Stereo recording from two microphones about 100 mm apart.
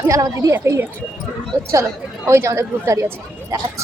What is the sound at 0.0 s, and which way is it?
Speech, 35° right (ahead or behind).